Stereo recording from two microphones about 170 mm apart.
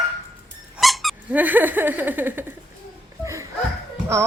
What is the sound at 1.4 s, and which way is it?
Laughter, 10° right (ahead or behind).